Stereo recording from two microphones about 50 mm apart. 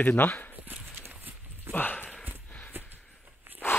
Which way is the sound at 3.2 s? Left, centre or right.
Right.